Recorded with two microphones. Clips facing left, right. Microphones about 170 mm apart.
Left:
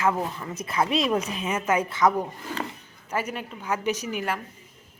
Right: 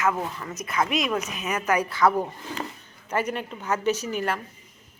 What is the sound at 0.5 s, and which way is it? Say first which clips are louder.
A woman's voice: left 1 dB; 30° left (ahead or behind).